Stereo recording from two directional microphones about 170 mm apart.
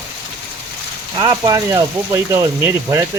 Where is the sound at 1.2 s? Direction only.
20° right (ahead or behind).